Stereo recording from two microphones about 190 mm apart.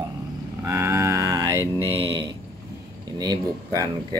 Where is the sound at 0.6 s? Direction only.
15° right (ahead or behind).